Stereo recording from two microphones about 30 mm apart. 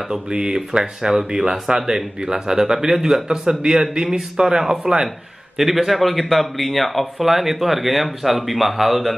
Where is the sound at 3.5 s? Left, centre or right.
Right.